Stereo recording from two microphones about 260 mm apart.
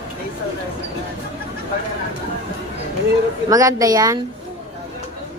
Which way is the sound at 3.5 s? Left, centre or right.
Centre.